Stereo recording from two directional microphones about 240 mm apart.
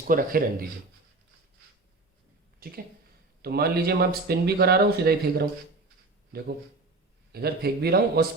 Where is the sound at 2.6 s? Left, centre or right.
Right.